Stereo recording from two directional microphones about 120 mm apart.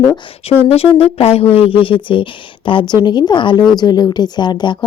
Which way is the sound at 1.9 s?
45° left (ahead or behind).